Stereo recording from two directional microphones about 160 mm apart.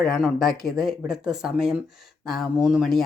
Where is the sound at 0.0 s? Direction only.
Centre (ahead or behind).